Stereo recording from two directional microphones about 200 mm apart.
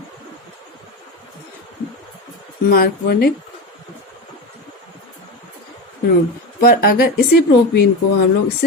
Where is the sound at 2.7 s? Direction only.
50° left (ahead or behind).